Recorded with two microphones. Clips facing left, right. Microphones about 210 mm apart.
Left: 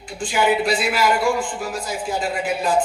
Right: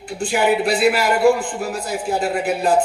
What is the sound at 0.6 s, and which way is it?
Speech, 60° right (ahead or behind).